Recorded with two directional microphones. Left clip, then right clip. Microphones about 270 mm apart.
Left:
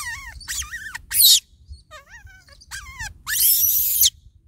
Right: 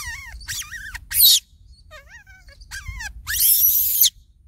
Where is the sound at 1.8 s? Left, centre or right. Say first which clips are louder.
Even; centre.